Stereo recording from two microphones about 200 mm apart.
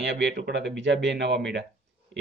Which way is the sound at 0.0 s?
60° right (ahead or behind).